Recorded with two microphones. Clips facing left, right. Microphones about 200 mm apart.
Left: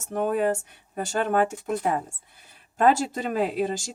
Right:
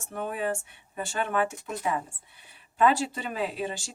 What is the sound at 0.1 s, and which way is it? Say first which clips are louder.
A woman's voice: left 7 dB; 45° left (ahead or behind).